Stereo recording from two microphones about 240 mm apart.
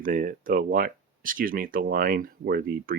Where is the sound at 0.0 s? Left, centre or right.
Right.